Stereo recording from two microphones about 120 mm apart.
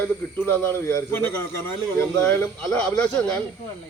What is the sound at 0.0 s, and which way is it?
Speech, 15° left (ahead or behind).